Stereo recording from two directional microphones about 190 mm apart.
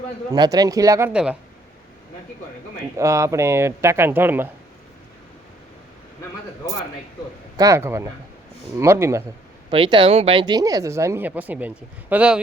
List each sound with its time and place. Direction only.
0.3 s speech: 20° right (ahead or behind)
3.0 s speech: 15° right (ahead or behind)
7.5 s speech: 15° right (ahead or behind)
9.6 s speech: 25° right (ahead or behind); by 12.4 s 5° right (ahead or behind)